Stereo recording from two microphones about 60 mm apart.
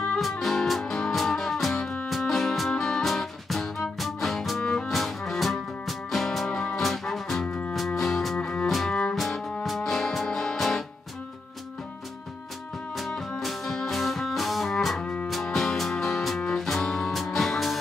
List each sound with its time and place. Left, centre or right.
0.2 s music: centre
2.0 s music: centre
7.4 s music: centre
7.7 s music: centre
8.4 s music: centre
8.6 s music: centre
13.4 s music: centre